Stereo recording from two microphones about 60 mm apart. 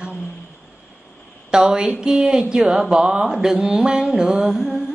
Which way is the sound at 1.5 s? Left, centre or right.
Centre.